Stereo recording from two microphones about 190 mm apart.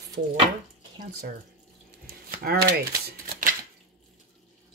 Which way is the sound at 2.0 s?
55° right (ahead or behind).